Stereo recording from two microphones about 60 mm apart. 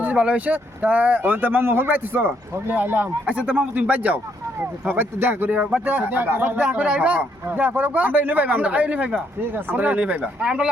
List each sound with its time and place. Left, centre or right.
0.0 s speech: right
4.9 s speech: right; by 10.7 s centre